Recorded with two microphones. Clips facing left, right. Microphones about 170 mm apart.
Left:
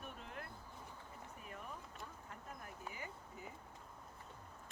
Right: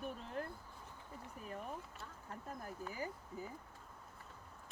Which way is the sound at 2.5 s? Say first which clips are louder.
Right 5 dB; 35° right (ahead or behind).